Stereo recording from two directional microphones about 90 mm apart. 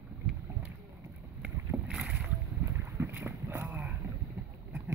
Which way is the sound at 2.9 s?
25° right (ahead or behind).